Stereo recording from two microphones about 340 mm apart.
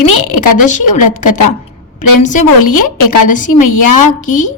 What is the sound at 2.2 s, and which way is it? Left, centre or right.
A woman's voice, left.